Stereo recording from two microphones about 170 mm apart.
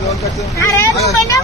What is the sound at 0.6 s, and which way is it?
Speech, 15° left (ahead or behind).